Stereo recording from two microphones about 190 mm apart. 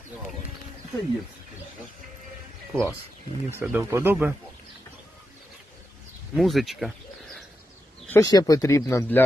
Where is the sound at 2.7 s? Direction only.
10° right (ahead or behind).